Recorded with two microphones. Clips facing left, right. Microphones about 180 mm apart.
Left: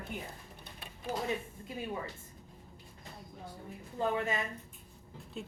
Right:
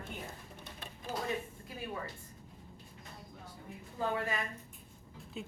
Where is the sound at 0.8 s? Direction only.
20° left (ahead or behind).